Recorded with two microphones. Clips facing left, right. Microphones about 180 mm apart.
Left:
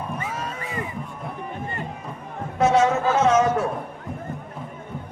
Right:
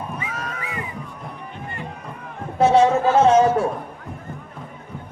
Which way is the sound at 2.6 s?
30° right (ahead or behind).